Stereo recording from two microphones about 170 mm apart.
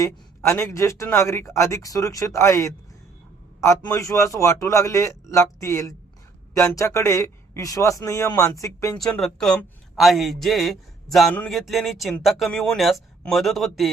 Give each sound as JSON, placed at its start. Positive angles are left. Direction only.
{"t": 0.0, "sound": "speech", "side_deg": 15}
{"t": 9.0, "sound": "a man's voice", "side_deg": 5}